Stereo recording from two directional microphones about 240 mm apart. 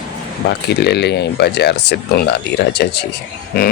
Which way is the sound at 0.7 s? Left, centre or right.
Left.